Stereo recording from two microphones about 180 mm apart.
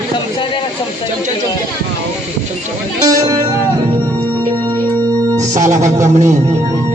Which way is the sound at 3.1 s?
20° right (ahead or behind).